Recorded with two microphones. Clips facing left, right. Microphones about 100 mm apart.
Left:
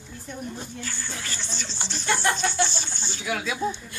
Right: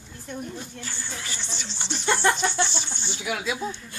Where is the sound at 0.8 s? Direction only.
25° right (ahead or behind).